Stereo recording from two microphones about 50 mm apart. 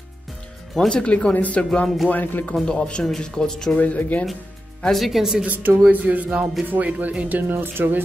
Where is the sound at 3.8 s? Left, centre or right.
Left.